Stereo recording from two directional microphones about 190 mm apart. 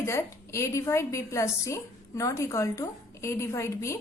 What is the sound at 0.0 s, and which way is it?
A woman's voice, 15° left (ahead or behind).